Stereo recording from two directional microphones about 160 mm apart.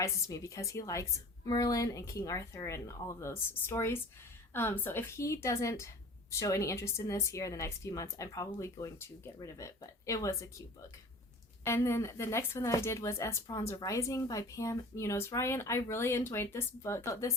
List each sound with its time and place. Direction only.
0.0 s a woman's voice: 20° left (ahead or behind)